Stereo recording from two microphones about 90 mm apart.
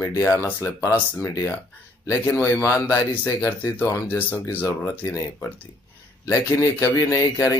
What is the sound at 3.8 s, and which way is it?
Speech, 25° left (ahead or behind).